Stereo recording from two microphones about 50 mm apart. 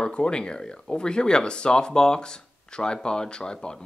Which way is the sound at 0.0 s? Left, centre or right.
Centre.